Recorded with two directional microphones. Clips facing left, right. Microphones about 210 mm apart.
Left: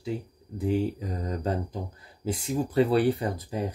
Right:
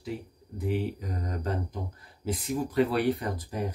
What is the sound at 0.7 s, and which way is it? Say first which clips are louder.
Speech: left 4 dB; 30° left (ahead or behind).